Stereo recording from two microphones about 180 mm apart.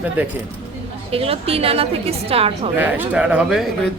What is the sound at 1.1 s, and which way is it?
A woman's voice, 30° right (ahead or behind).